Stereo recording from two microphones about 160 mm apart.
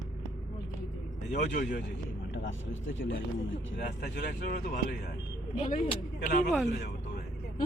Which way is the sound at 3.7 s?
65° left (ahead or behind).